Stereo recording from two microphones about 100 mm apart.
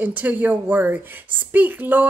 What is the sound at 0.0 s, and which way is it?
A woman's voice, 15° right (ahead or behind).